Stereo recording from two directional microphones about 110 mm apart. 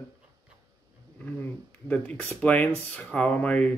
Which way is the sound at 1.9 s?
15° left (ahead or behind).